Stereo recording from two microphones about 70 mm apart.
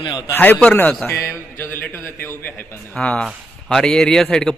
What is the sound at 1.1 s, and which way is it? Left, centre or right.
Mantra, left.